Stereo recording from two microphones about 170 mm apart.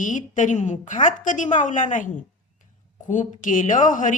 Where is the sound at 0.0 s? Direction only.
50° left (ahead or behind).